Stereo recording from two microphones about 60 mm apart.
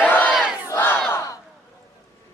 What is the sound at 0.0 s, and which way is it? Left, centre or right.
Battle cry, left.